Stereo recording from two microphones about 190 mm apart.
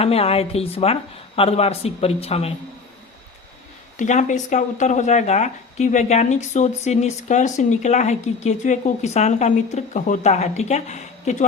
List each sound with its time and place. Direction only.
0.0 s speech: 30° left (ahead or behind)
3.9 s speech: 40° left (ahead or behind)